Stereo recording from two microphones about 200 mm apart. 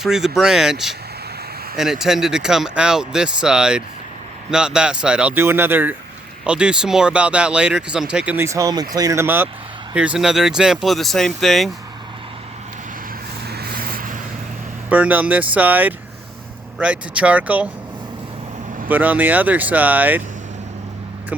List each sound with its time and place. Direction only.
0.0 s speech: centre (ahead or behind)
13.5 s vehicle: 50° right (ahead or behind)
14.8 s speech: 10° right (ahead or behind)
18.9 s speech: 10° right (ahead or behind)